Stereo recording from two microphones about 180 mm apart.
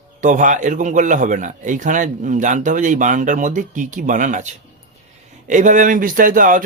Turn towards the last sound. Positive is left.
turn(degrees=-50)  # may be behind; listen again after turning